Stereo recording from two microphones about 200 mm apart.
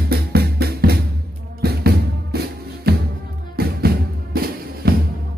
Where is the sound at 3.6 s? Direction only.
50° right (ahead or behind).